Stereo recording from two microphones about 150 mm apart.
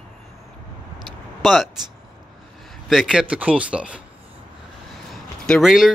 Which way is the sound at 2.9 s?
5° right (ahead or behind).